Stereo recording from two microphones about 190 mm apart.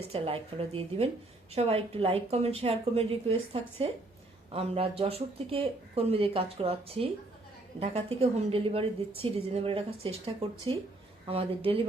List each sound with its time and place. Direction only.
0.0 s a woman's voice: 30° right (ahead or behind)